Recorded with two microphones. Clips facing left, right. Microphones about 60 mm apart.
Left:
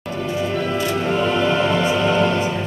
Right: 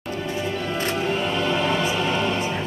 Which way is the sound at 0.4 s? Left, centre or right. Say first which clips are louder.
Left 6 dB; left.